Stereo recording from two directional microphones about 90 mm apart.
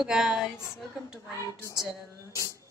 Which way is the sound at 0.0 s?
5° right (ahead or behind).